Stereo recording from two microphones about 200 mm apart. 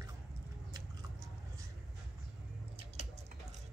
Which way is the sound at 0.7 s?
15° right (ahead or behind).